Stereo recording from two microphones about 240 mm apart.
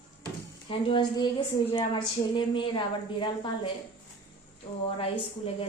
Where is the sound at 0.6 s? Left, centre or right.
Left.